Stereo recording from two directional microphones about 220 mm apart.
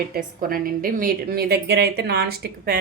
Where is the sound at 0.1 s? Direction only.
40° right (ahead or behind).